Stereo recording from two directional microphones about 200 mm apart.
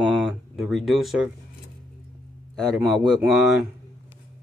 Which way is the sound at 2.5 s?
Centre (ahead or behind).